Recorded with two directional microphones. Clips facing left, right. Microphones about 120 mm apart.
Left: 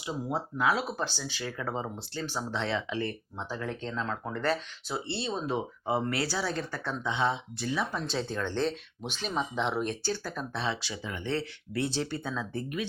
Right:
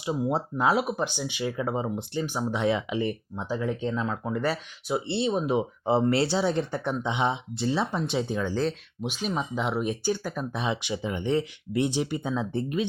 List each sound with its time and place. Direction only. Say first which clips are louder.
0.0 s speech: right 6 dB; 25° right (ahead or behind)
0.9 s speech: right 5 dB; 15° right (ahead or behind)
8.0 s speech: right 5 dB; 15° right (ahead or behind)